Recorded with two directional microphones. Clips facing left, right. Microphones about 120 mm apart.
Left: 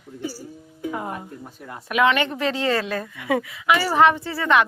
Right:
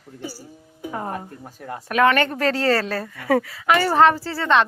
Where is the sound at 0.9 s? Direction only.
35° right (ahead or behind).